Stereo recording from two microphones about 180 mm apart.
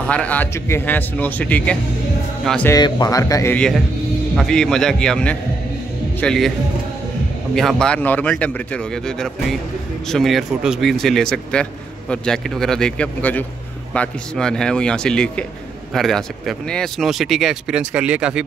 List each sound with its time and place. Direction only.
0.0 s speech: 5° left (ahead or behind)
2.7 s speech: 20° left (ahead or behind)
3.5 s speech: 5° left (ahead or behind)
7.5 s speech: 5° left (ahead or behind)